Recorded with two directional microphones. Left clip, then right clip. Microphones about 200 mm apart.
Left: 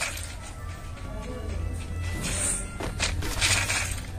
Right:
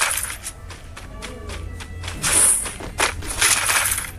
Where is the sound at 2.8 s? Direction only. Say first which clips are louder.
Right 7 dB; centre (ahead or behind).